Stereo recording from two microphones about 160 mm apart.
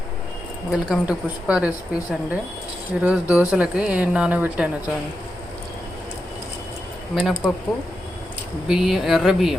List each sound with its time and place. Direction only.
0.7 s a woman's voice: 5° right (ahead or behind)
7.2 s speech: 5° right (ahead or behind)
8.6 s speech: centre (ahead or behind)